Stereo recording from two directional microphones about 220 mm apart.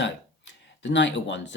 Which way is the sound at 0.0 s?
55° left (ahead or behind).